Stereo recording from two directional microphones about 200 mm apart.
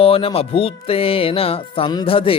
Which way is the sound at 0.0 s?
30° left (ahead or behind).